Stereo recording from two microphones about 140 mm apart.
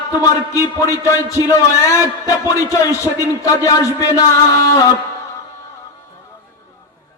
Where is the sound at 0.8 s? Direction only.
20° left (ahead or behind).